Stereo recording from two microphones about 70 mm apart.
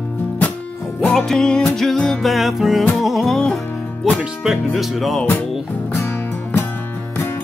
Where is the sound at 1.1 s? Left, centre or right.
Centre.